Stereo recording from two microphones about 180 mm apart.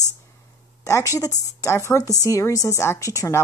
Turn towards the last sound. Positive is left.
turn(degrees=20)  # may be behind; listen again after turning